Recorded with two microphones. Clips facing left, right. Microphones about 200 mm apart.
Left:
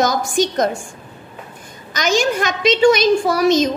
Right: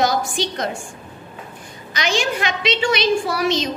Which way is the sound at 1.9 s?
45° left (ahead or behind).